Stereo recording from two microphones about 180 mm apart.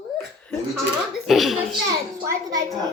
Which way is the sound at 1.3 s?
Centre (ahead or behind).